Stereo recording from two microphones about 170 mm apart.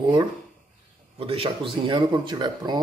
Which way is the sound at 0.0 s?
25° right (ahead or behind).